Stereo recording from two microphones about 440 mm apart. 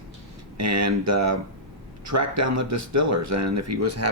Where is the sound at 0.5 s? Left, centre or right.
Right.